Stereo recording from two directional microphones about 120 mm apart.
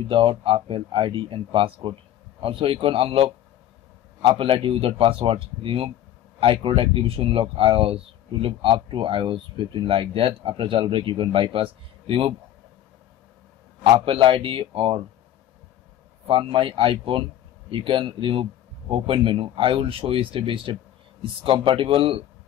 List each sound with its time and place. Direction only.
0.1 s speech: 45° right (ahead or behind)
4.3 s speech: 45° right (ahead or behind)
13.8 s speech: 50° right (ahead or behind)
16.3 s speech: 50° right (ahead or behind)